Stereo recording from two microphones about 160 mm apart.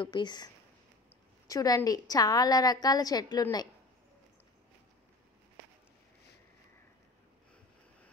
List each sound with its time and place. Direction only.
0.0 s a woman's voice: 25° left (ahead or behind)
1.5 s a woman's voice: 20° left (ahead or behind)